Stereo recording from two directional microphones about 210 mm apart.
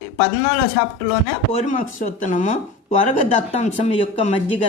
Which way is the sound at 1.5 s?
40° left (ahead or behind).